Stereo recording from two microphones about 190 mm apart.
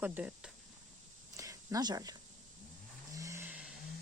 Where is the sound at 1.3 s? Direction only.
15° right (ahead or behind).